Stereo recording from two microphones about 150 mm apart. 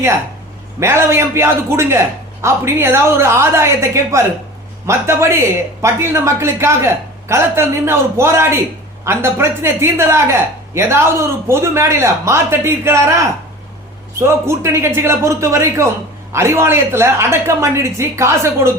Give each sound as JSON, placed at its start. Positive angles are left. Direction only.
{"t": 0.8, "sound": "speech", "side_deg": -15}